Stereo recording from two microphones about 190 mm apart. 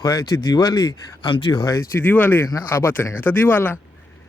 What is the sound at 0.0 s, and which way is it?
Speech, 20° left (ahead or behind).